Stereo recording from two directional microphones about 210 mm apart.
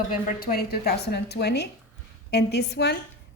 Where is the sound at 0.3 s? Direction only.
45° left (ahead or behind).